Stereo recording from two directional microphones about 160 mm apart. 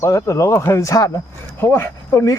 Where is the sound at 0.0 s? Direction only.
20° left (ahead or behind).